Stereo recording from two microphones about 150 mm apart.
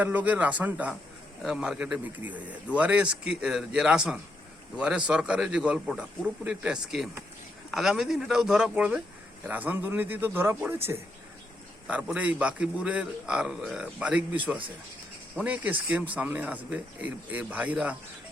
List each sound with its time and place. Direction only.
0.0 s a man's voice: 10° right (ahead or behind)
11.9 s a man's voice: 10° right (ahead or behind)